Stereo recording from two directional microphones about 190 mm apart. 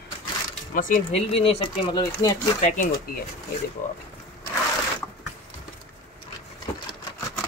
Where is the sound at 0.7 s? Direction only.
45° left (ahead or behind).